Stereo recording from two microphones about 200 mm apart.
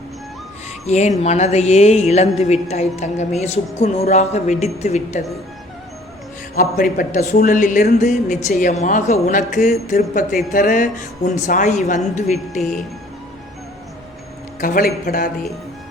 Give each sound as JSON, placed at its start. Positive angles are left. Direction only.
{"t": 0.9, "sound": "a woman's voice", "side_deg": 35}
{"t": 6.6, "sound": "a woman's voice", "side_deg": 40}
{"t": 14.6, "sound": "a man's voice", "side_deg": 45}